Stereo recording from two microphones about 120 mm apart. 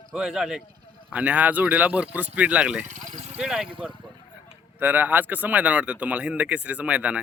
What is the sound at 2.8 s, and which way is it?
Vehicle, 90° right.